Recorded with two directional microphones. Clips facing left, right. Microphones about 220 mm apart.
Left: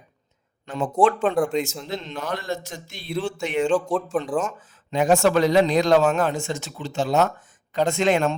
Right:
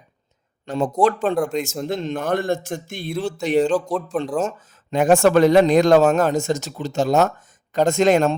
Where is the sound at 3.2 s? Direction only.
35° right (ahead or behind).